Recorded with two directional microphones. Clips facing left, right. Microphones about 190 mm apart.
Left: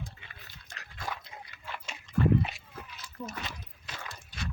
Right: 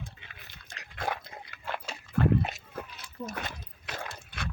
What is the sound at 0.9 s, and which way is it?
Dog, 60° right (ahead or behind).